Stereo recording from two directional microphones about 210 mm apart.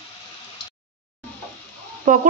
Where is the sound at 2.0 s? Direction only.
40° right (ahead or behind).